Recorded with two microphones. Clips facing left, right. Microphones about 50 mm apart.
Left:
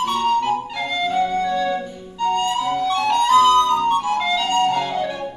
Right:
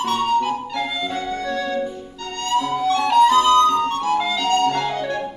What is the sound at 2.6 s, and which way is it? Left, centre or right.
Flute, centre.